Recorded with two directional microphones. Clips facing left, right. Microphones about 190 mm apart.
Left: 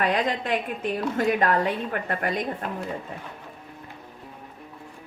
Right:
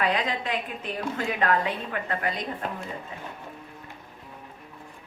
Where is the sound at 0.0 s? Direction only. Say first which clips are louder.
Left 2 dB; 45° left (ahead or behind).